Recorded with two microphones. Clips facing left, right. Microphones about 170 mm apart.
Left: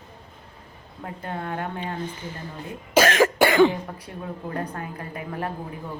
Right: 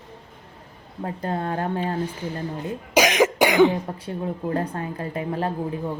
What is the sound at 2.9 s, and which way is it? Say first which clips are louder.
Cough: even; 15° right (ahead or behind).